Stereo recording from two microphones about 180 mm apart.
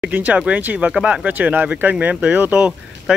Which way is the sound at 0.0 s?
10° right (ahead or behind).